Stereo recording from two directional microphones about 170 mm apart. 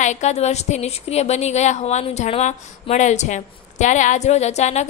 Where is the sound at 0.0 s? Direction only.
45° left (ahead or behind).